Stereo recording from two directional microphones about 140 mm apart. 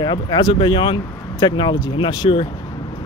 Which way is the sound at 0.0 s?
30° left (ahead or behind).